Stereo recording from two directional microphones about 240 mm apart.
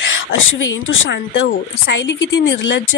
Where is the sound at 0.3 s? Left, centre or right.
Left.